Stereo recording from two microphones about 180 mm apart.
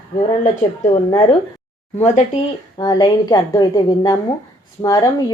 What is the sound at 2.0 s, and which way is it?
Speech, 40° left (ahead or behind).